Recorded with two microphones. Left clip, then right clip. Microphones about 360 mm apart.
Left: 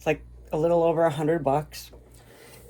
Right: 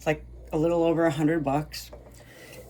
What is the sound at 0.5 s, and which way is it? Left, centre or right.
Speech, centre.